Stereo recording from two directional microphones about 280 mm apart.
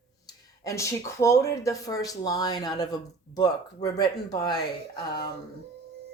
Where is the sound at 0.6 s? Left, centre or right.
Centre.